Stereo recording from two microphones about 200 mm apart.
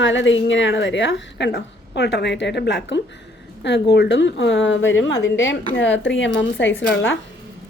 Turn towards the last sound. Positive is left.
turn(degrees=70)  # may be behind; listen again after turning